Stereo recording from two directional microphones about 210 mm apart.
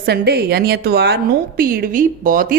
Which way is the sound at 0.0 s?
50° right (ahead or behind).